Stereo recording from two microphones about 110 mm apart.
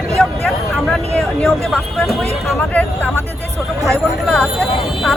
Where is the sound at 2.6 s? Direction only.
15° left (ahead or behind).